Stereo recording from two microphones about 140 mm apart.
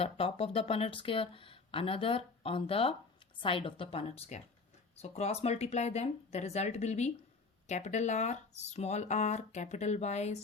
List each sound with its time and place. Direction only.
0.0 s speech: 45° left (ahead or behind)